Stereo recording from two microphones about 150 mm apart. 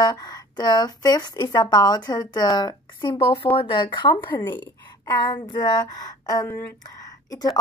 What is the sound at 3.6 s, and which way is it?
Speech, 35° left (ahead or behind).